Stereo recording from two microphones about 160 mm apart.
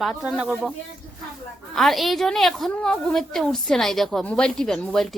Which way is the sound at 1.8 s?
Centre (ahead or behind).